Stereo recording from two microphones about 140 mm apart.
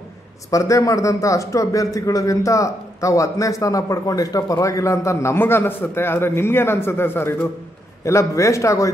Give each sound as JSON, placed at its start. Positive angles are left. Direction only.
{"t": 0.5, "sound": "a man's voice", "side_deg": 25}